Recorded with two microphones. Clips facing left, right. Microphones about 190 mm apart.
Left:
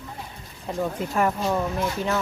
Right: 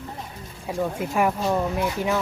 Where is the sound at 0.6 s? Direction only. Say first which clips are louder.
Right 1 dB; 10° right (ahead or behind).